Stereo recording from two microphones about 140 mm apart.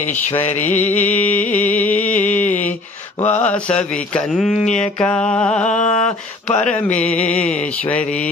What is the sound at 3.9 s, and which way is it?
Speech, 5° left (ahead or behind).